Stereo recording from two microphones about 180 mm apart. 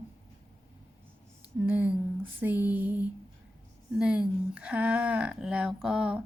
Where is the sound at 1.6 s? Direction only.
10° right (ahead or behind).